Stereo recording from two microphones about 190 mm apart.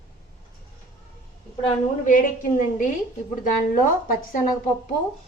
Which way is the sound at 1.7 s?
45° left (ahead or behind).